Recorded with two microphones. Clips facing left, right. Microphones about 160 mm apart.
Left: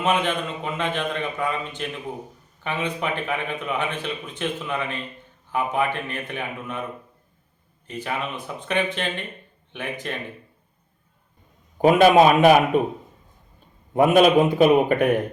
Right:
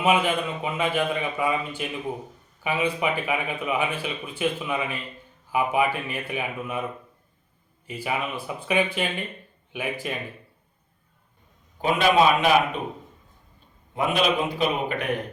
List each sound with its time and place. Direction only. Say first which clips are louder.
0.0 s speech: right 1 dB; 10° right (ahead or behind)
7.9 s speech: even; 10° right (ahead or behind)
11.8 s a man's voice: left 6 dB; 50° left (ahead or behind)
13.9 s a man's voice: left 8 dB; 50° left (ahead or behind)